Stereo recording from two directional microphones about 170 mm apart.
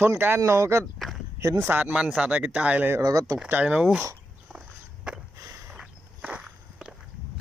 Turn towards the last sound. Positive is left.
turn(degrees=-5)  # may be behind; listen again after turning